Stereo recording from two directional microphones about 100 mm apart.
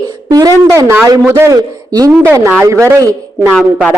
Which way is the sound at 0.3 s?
35° right (ahead or behind).